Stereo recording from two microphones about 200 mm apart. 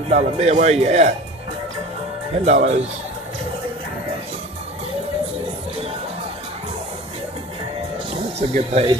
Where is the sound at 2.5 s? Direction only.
35° right (ahead or behind).